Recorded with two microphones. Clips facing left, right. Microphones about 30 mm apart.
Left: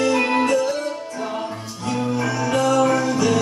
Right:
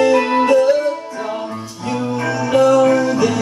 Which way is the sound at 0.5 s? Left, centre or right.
Right.